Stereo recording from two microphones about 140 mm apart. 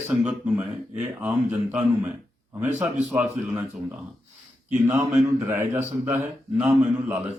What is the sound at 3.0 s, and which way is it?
Speech, 10° right (ahead or behind).